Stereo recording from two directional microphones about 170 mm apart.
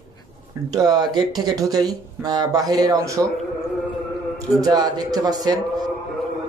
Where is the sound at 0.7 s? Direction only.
25° right (ahead or behind).